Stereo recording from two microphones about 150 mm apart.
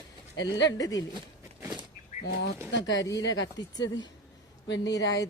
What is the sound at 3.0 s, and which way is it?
Speech, 25° left (ahead or behind).